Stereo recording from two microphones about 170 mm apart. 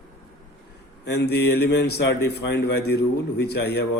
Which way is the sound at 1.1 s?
75° left (ahead or behind).